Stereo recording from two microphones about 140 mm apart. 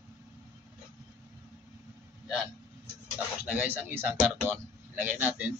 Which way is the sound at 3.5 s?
10° right (ahead or behind).